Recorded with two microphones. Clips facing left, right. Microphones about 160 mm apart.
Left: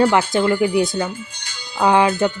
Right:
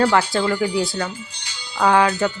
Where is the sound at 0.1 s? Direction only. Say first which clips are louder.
Left 2 dB; 20° left (ahead or behind).